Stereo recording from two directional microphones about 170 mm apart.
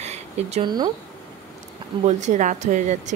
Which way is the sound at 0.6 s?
25° right (ahead or behind).